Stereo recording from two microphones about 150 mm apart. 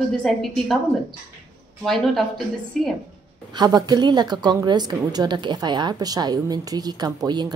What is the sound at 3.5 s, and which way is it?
A woman's voice, 25° right (ahead or behind).